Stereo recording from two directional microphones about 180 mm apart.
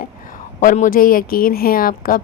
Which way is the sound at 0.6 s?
45° left (ahead or behind).